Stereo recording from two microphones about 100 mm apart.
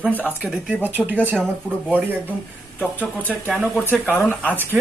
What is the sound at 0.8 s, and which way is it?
Speech, 20° right (ahead or behind).